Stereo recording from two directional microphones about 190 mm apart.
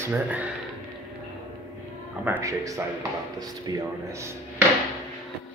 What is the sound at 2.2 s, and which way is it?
Speech, 15° right (ahead or behind).